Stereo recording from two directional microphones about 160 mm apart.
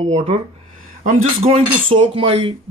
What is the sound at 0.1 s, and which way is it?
Speech, 40° right (ahead or behind).